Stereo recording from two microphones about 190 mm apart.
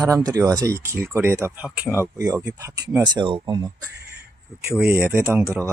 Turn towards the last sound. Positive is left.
turn(degrees=-15)  # may be behind; listen again after turning